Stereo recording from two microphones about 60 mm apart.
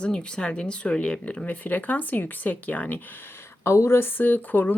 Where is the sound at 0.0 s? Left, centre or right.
Centre.